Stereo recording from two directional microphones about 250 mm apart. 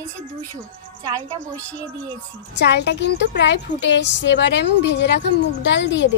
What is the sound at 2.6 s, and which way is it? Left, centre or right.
A woman's voice, left.